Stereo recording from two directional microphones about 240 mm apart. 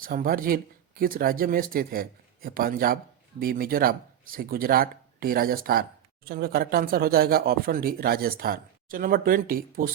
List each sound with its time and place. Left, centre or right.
0.0 s speech: right